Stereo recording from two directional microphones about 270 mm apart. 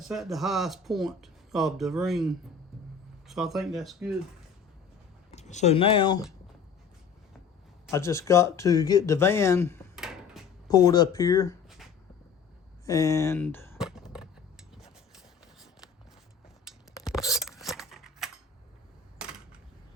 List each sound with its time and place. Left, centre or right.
0.1 s speech: centre
5.3 s speech: left
7.9 s speech: centre
9.9 s a sound: centre
10.7 s speech: centre
12.8 s speech: centre
13.7 s a sound: centre